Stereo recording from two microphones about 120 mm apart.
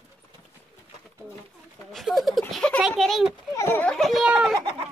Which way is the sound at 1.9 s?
Centre (ahead or behind).